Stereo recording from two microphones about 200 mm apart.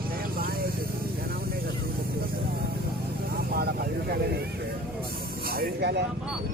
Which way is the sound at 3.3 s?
50° right (ahead or behind).